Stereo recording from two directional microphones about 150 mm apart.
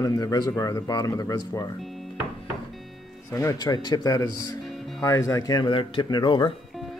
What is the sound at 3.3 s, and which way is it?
Speech, 25° left (ahead or behind).